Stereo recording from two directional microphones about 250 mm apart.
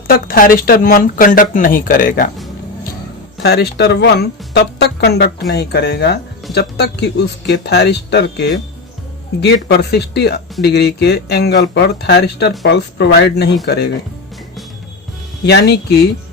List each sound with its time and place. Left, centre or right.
0.1 s speech: left
3.4 s speech: left
9.6 s speech: left
15.4 s speech: left